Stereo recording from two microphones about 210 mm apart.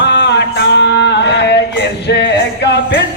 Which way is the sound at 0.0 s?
55° left (ahead or behind).